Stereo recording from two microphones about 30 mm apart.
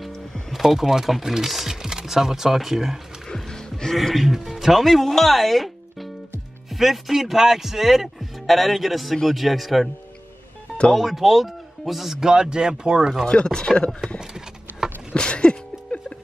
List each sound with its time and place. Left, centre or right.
0.5 s speech: centre
1.7 s speech: centre
3.4 s music: left
3.9 s speech: centre
4.2 s speech: centre
4.8 s speech: centre
6.7 s speech: centre
8.4 s speech: centre
11.0 s speech: centre
12.2 s speech: right
13.3 s speech: left
14.2 s a sound: centre
15.1 s a sound: left